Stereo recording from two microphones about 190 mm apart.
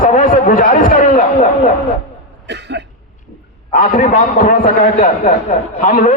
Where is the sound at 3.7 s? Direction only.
45° left (ahead or behind).